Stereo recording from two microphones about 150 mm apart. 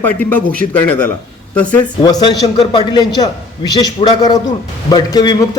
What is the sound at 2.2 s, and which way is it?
A man's voice, 25° left (ahead or behind).